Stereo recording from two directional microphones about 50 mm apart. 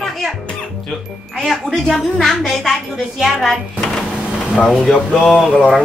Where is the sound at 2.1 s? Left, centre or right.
Centre.